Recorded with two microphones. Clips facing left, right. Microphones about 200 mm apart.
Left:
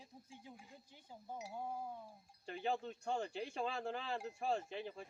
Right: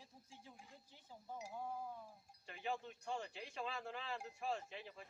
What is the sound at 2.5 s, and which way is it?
Speech, 30° left (ahead or behind).